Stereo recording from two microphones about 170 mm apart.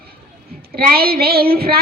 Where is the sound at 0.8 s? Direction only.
65° right (ahead or behind).